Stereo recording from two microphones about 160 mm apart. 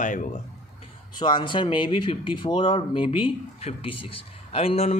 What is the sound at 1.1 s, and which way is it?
Speech, 30° left (ahead or behind).